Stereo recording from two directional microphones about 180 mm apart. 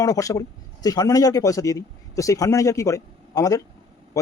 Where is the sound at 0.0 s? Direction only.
20° left (ahead or behind).